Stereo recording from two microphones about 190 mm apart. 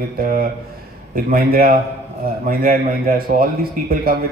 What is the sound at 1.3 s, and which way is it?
Speech, 50° right (ahead or behind).